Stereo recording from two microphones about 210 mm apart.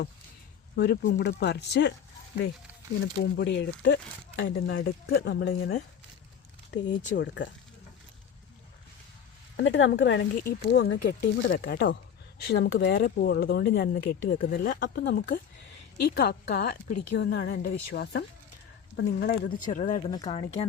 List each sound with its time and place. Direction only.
0.8 s a woman's voice: 50° left (ahead or behind)
3.3 s speech: 55° left (ahead or behind)
6.7 s speech: 55° left (ahead or behind)
9.6 s a woman's voice: 60° left (ahead or behind); by 20.7 s 30° left (ahead or behind)